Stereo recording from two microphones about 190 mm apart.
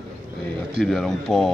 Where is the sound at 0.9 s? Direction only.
Centre (ahead or behind).